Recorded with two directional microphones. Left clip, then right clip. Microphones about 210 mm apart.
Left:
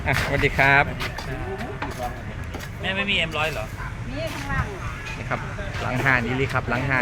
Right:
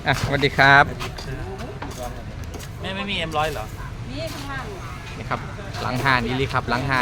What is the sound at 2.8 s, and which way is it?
Speech, 35° right (ahead or behind).